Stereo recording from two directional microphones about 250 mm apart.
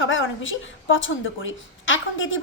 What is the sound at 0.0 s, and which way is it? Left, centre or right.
A woman's voice, left.